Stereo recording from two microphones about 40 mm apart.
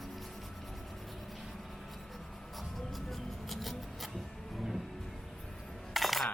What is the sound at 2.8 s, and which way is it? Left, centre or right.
Music, centre.